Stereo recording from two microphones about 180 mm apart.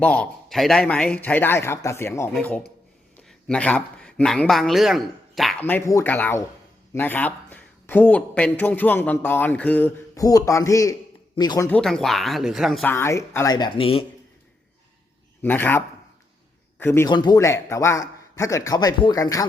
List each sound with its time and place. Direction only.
0.0 s a man's voice: 5° left (ahead or behind); by 11.7 s 20° left (ahead or behind)
11.7 s speech: 5° left (ahead or behind)
12.8 s a man's voice: 15° left (ahead or behind); by 14.0 s 30° left (ahead or behind)
15.4 s a man's voice: 10° left (ahead or behind)
17.1 s a man's voice: 25° left (ahead or behind)